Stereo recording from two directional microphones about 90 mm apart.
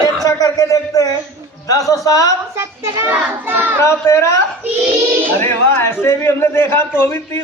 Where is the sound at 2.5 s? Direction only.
35° right (ahead or behind).